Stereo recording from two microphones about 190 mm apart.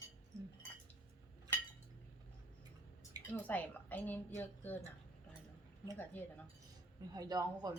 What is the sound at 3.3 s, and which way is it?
A woman's voice, 10° left (ahead or behind).